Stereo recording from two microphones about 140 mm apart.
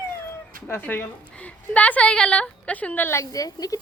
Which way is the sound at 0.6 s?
10° left (ahead or behind).